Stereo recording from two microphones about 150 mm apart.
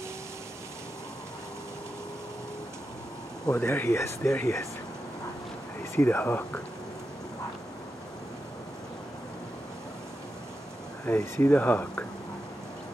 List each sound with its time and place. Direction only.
3.4 s speech: 10° left (ahead or behind)
5.9 s speech: 15° left (ahead or behind)
11.1 s speech: 15° left (ahead or behind)